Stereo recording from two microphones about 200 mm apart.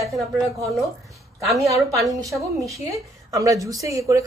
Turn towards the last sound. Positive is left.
turn(degrees=-15)  # may be behind; listen again after turning